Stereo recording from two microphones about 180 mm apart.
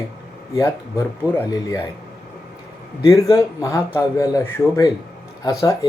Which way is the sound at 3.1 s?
20° left (ahead or behind).